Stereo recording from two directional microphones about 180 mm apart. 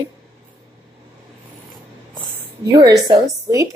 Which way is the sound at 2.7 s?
20° right (ahead or behind).